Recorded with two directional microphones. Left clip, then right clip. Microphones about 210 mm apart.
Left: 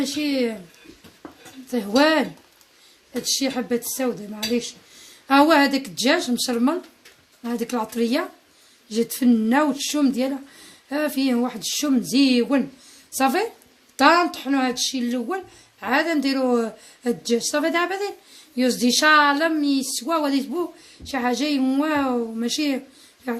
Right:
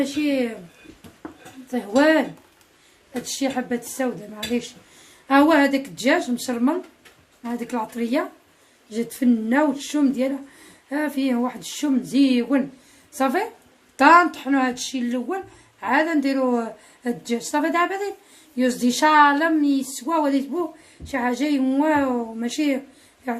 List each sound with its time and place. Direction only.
0.2 s speech: 35° left (ahead or behind)
1.7 s speech: 40° left (ahead or behind)
3.3 s speech: 35° left (ahead or behind)